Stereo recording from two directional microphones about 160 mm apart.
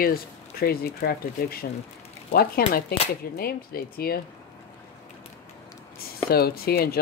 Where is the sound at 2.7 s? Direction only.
75° left (ahead or behind).